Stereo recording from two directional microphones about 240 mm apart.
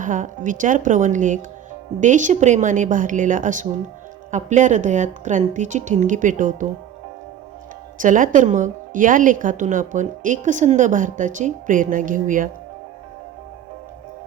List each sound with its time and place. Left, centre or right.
0.0 s a woman's voice: right
7.9 s a woman's voice: right